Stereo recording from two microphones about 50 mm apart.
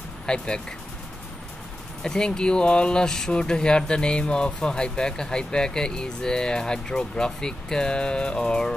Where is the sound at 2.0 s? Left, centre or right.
Centre.